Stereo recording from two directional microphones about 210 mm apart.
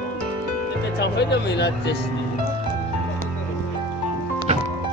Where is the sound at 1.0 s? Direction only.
55° left (ahead or behind).